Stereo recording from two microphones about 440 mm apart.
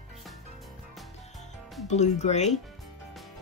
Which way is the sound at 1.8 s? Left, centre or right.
Centre.